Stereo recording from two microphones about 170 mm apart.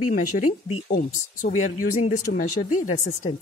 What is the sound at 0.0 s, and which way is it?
Speech, 50° left (ahead or behind).